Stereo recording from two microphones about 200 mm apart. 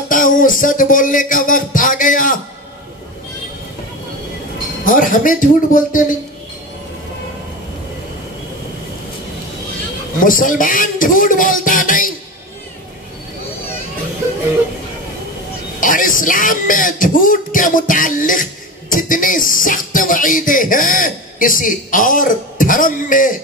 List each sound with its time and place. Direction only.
0.1 s speech: 40° left (ahead or behind)
4.8 s speech: 40° left (ahead or behind)
10.2 s speech: 40° left (ahead or behind)
15.8 s speech: 40° left (ahead or behind)